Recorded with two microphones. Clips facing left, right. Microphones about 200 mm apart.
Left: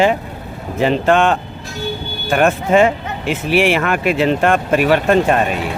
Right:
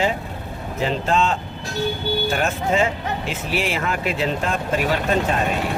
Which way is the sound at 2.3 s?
60° left (ahead or behind).